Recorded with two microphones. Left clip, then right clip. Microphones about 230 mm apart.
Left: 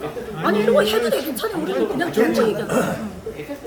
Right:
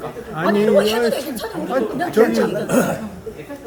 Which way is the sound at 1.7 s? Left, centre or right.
Centre.